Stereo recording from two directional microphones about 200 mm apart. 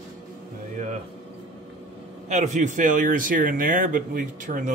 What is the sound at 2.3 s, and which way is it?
Speech, 40° right (ahead or behind).